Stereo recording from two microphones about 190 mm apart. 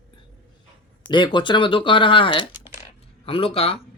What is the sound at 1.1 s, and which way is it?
Speech, 25° left (ahead or behind).